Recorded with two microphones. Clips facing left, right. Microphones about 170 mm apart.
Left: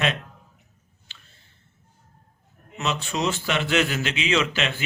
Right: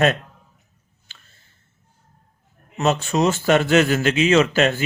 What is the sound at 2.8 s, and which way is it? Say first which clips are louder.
Speech: right 7 dB; 45° right (ahead or behind).